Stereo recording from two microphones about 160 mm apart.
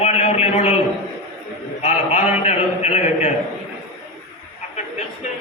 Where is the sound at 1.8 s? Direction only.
45° left (ahead or behind).